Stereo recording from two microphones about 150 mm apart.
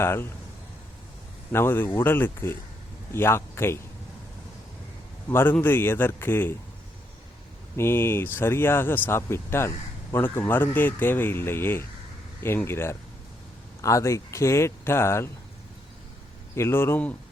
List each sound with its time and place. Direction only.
0.0 s speech: 15° left (ahead or behind)
1.5 s speech: 15° left (ahead or behind)
5.3 s speech: 15° left (ahead or behind)
7.8 s speech: 15° left (ahead or behind)
16.6 s speech: 15° left (ahead or behind)